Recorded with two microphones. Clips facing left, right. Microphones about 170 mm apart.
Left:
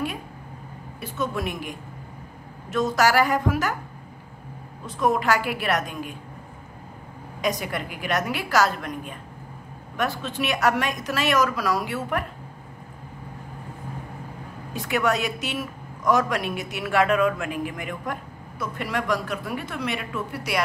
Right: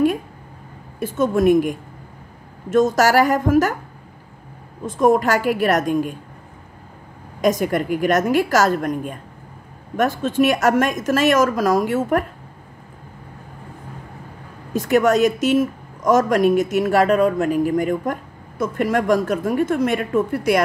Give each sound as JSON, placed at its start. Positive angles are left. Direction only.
{"t": 0.9, "sound": "a woman's voice", "side_deg": -50}
{"t": 4.8, "sound": "a woman's voice", "side_deg": -45}
{"t": 7.4, "sound": "a woman's voice", "side_deg": -45}
{"t": 14.7, "sound": "a woman's voice", "side_deg": -45}